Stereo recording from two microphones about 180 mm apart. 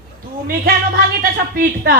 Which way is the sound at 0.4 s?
55° right (ahead or behind).